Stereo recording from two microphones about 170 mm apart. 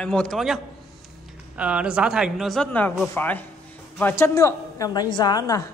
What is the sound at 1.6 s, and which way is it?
A man's voice, 5° right (ahead or behind).